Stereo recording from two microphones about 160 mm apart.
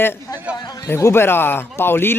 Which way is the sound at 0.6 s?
25° left (ahead or behind).